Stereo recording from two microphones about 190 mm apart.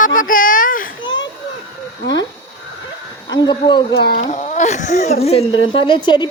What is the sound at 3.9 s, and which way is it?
Speech, 60° left (ahead or behind).